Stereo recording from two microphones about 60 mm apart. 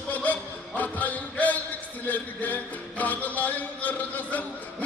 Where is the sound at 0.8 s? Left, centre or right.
Left.